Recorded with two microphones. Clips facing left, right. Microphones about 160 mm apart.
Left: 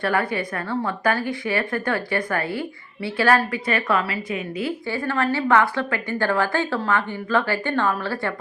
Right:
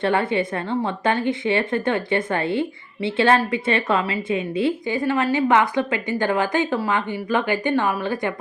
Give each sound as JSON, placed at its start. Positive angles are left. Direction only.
{"t": 0.0, "sound": "a woman's voice", "side_deg": -25}